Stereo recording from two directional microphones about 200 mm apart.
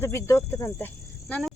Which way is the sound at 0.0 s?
10° left (ahead or behind).